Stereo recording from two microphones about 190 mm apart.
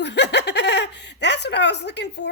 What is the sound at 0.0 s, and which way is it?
Speech, 65° left (ahead or behind).